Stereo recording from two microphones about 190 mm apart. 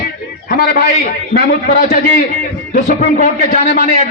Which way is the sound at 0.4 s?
55° left (ahead or behind).